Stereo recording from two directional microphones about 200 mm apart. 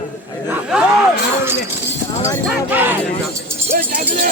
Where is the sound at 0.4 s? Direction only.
5° right (ahead or behind).